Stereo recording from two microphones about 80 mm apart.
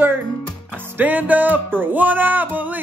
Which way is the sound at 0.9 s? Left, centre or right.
Right.